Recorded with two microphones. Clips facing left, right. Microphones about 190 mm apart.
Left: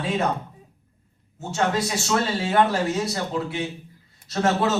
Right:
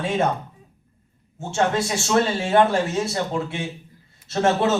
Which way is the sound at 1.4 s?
30° right (ahead or behind).